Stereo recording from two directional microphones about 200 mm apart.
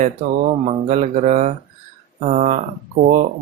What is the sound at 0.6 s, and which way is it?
Speech, 35° right (ahead or behind).